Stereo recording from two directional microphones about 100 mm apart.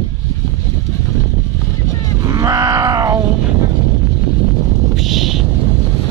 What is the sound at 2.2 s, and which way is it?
Grunt, 35° right (ahead or behind).